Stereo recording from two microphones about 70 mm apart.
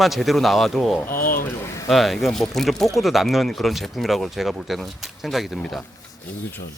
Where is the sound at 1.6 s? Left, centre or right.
Left.